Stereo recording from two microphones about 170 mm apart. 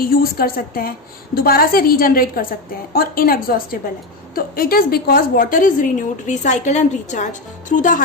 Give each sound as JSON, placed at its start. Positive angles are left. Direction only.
{"t": 0.0, "sound": "a woman's voice", "side_deg": 60}